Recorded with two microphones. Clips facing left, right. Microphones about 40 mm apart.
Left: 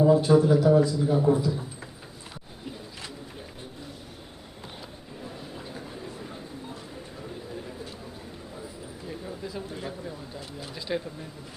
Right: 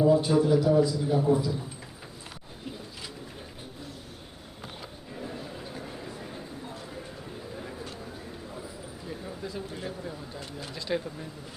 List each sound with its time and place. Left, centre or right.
0.0 s a man's voice: centre
9.0 s speech: centre